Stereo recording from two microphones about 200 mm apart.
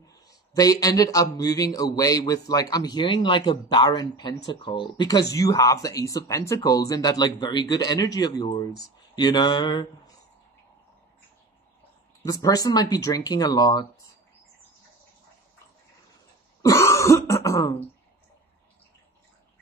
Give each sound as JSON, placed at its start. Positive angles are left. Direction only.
{"t": 0.0, "sound": "speech", "side_deg": 15}
{"t": 12.3, "sound": "speech", "side_deg": 20}
{"t": 16.6, "sound": "throat clearing", "side_deg": 15}